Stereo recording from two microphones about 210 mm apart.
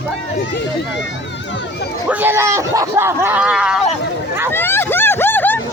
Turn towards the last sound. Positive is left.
turn(degrees=10)  # may be behind; listen again after turning